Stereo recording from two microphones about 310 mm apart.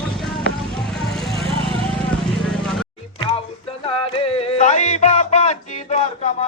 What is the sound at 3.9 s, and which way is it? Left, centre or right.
Music, centre.